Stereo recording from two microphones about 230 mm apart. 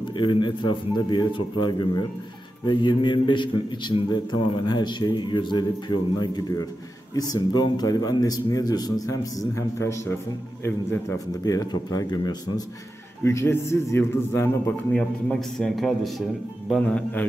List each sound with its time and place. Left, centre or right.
0.1 s a man's voice: centre